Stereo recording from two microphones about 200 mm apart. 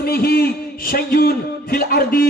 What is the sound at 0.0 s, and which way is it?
A man's voice, 50° left (ahead or behind).